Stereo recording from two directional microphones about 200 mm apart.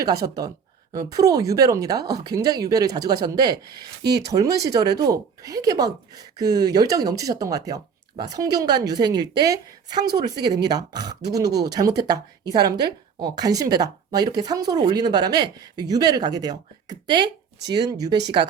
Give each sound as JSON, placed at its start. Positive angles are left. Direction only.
{"t": 0.9, "sound": "a woman's voice", "side_deg": -20}
{"t": 4.0, "sound": "speech", "side_deg": -55}
{"t": 4.3, "sound": "a woman's voice", "side_deg": -15}